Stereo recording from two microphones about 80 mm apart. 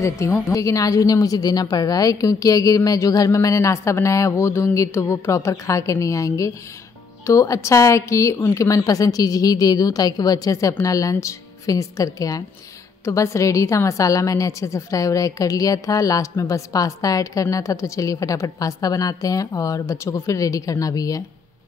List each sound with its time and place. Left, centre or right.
0.5 s a woman's voice: left